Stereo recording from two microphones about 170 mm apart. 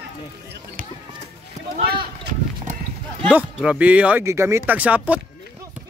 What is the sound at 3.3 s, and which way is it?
Speech, 10° right (ahead or behind).